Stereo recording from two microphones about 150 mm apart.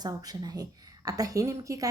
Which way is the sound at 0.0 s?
25° right (ahead or behind).